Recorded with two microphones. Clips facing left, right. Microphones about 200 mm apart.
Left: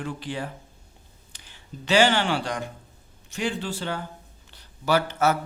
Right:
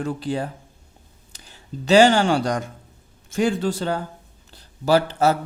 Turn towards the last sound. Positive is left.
turn(degrees=-35)  # may be behind; listen again after turning